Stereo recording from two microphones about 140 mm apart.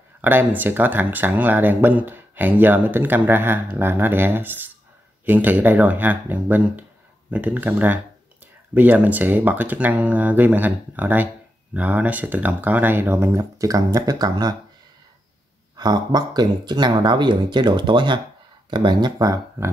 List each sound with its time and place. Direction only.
0.2 s speech: 15° right (ahead or behind)
15.8 s speech: 30° right (ahead or behind)